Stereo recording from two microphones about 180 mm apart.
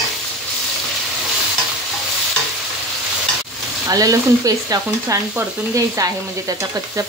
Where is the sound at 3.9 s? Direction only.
20° right (ahead or behind).